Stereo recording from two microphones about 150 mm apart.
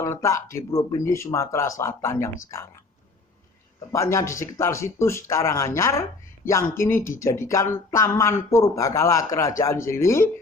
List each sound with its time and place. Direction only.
0.0 s speech: 20° left (ahead or behind)
3.9 s speech: 20° left (ahead or behind)